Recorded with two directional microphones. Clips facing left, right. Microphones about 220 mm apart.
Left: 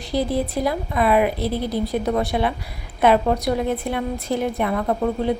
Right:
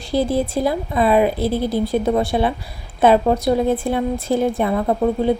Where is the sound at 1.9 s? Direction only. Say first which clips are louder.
Right 3 dB; 30° right (ahead or behind).